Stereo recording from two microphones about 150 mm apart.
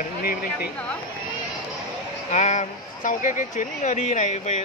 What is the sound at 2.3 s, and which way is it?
Speech, 50° left (ahead or behind).